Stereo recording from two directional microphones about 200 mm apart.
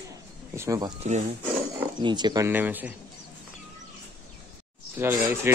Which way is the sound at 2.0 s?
20° right (ahead or behind).